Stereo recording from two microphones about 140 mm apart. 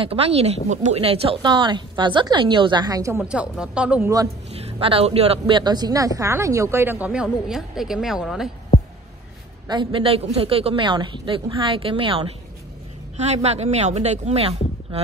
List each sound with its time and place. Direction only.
0.0 s a woman's voice: 45° right (ahead or behind); by 3.2 s 25° right (ahead or behind)
3.2 s speech: 5° right (ahead or behind)
4.5 s speech: 45° right (ahead or behind)
5.6 s speech: 30° right (ahead or behind); by 8.5 s 5° right (ahead or behind)
9.7 s a woman's voice: 35° right (ahead or behind)
13.2 s speech: 50° right (ahead or behind)